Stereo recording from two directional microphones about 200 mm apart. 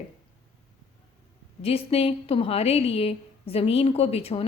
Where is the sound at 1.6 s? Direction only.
30° left (ahead or behind).